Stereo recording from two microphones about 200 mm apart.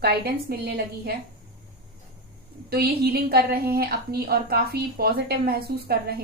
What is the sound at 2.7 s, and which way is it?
A woman's voice, 50° right (ahead or behind).